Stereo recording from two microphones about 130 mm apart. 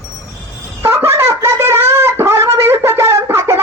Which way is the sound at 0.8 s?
20° right (ahead or behind).